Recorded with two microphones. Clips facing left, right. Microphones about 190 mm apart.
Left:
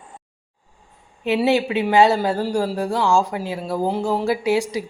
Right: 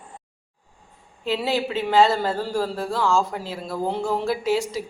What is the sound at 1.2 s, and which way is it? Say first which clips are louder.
Speech: left 6 dB; 15° left (ahead or behind).